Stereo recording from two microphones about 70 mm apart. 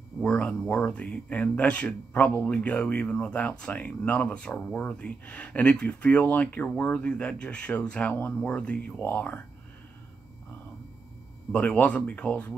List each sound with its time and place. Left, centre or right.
0.2 s speech: centre
11.5 s speech: centre